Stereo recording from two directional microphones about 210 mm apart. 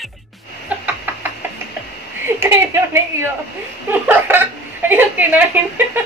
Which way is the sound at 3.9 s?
10° right (ahead or behind).